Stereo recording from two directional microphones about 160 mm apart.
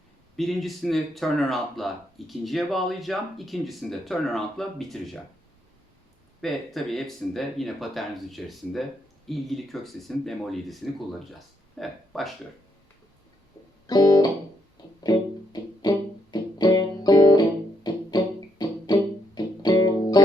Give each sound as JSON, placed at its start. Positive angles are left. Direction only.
{"t": 0.3, "sound": "speech", "side_deg": 0}
{"t": 6.4, "sound": "speech", "side_deg": 0}
{"t": 13.8, "sound": "music", "side_deg": 25}
{"t": 15.5, "sound": "music", "side_deg": 25}